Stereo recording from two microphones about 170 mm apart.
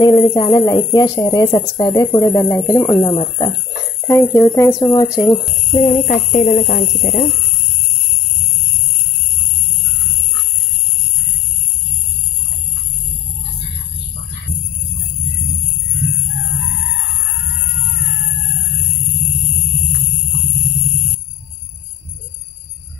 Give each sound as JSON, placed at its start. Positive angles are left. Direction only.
{"t": 0.0, "sound": "speech", "side_deg": 25}
{"t": 5.7, "sound": "speech", "side_deg": 50}